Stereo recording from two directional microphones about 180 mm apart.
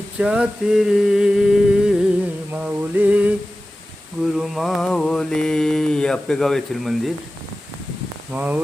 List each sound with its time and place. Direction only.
0.2 s mantra: 5° right (ahead or behind)
4.4 s mantra: centre (ahead or behind)
8.3 s mantra: 10° right (ahead or behind)